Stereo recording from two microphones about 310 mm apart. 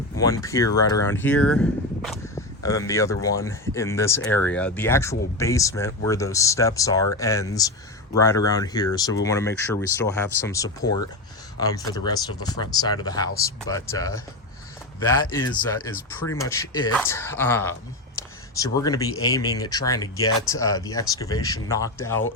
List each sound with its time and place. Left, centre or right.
0.4 s speech: centre